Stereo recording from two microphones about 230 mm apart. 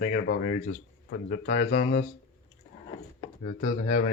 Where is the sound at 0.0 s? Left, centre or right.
Left.